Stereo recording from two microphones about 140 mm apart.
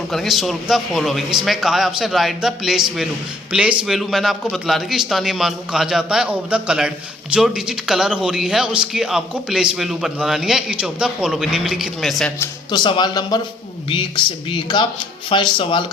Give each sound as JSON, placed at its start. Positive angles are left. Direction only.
{"t": 0.1, "sound": "a man's voice", "side_deg": 0}
{"t": 12.7, "sound": "speech", "side_deg": 35}